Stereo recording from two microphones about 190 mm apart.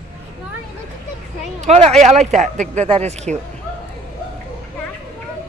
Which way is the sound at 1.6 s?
35° right (ahead or behind).